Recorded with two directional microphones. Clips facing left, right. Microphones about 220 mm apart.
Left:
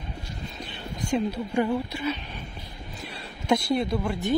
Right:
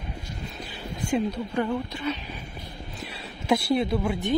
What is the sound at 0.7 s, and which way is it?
Whispering, 5° right (ahead or behind).